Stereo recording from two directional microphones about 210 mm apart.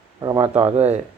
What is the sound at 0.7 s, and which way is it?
Speech, 30° right (ahead or behind).